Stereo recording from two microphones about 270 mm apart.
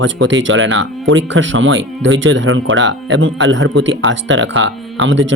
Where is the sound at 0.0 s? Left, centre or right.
Right.